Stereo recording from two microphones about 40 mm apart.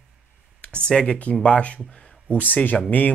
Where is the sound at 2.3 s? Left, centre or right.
Left.